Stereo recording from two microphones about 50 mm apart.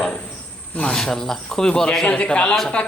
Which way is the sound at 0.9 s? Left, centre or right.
Centre.